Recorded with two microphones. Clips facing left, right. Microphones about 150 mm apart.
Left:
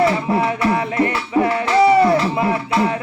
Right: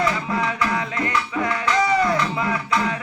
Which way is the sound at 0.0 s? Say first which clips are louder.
Left 6 dB; 30° left (ahead or behind).